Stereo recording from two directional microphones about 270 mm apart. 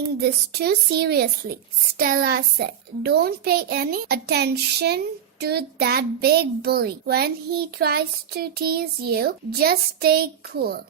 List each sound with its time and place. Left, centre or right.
0.2 s a child's voice: right